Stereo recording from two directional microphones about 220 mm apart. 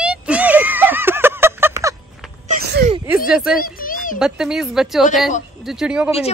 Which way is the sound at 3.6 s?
40° left (ahead or behind).